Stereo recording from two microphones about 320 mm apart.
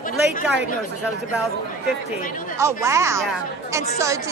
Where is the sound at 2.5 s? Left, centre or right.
Centre.